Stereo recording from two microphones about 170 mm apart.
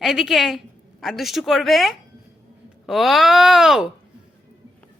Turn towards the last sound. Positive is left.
turn(degrees=0)  # may be behind; listen again after turning